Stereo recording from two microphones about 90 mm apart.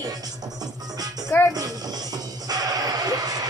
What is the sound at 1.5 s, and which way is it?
Music, 45° right (ahead or behind).